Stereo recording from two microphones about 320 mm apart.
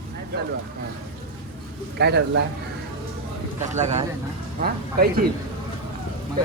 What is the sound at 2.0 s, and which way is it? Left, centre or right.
Speech, right.